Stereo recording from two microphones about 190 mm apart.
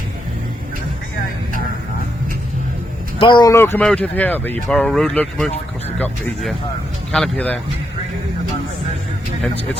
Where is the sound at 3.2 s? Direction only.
25° left (ahead or behind); by 7.6 s 5° left (ahead or behind).